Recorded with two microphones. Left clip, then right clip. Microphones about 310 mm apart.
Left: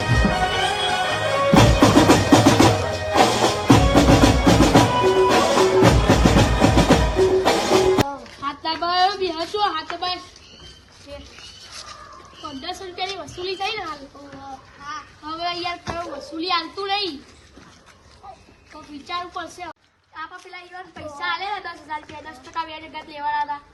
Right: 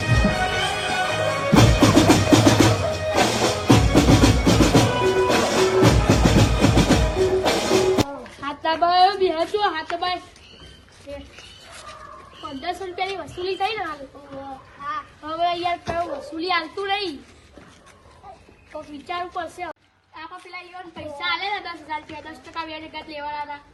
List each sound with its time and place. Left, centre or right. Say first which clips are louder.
0.0 s music: left 1 dB; centre
12.6 s a sound: right 2 dB; centre
14.8 s child singing: right 3 dB; centre
16.4 s a woman's voice: left 1 dB; centre
19.0 s a woman's voice: even; centre
21.3 s a woman's voice: right 1 dB; left